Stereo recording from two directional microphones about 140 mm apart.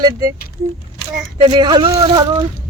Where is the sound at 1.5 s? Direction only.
30° right (ahead or behind).